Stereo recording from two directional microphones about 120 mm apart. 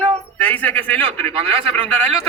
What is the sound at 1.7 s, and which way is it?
Speech, 10° left (ahead or behind).